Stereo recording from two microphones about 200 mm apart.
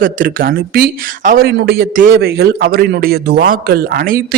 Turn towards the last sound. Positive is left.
turn(degrees=-45)  # may be behind; listen again after turning